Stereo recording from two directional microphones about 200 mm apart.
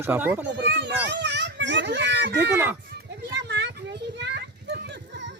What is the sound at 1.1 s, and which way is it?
Children playing, 60° right (ahead or behind).